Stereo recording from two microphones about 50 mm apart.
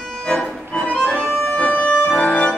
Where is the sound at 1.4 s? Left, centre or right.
Left.